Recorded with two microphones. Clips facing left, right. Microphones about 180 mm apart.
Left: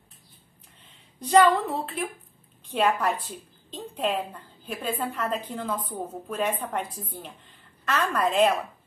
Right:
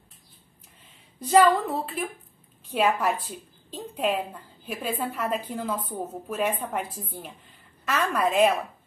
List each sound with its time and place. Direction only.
1.2 s a woman's voice: 5° right (ahead or behind)